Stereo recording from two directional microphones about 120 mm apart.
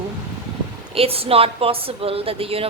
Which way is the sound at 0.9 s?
55° right (ahead or behind).